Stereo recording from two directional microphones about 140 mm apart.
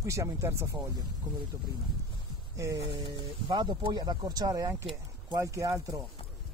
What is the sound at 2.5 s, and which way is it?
Speech, 25° right (ahead or behind).